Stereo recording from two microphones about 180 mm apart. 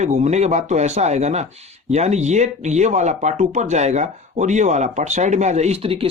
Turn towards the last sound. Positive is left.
turn(degrees=-30)  # may be behind; listen again after turning